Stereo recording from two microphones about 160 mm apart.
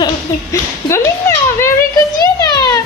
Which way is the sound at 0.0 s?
15° left (ahead or behind).